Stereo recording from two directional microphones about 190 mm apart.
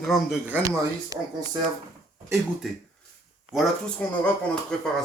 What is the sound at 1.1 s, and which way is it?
Speech, 20° right (ahead or behind).